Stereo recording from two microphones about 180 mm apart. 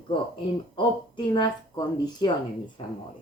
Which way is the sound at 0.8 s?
25° left (ahead or behind).